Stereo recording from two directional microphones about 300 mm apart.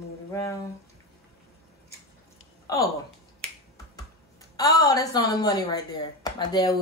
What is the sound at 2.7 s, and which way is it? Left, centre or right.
Speech, centre.